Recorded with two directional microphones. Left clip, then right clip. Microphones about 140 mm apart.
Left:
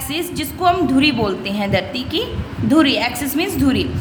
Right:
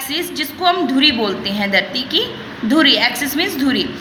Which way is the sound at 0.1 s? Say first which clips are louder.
Right 1 dB; 35° left (ahead or behind).